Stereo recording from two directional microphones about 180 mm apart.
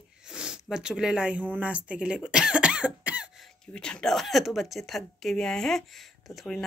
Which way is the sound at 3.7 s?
5° left (ahead or behind).